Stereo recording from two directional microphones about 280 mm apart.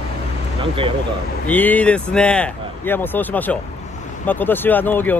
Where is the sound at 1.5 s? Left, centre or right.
Centre.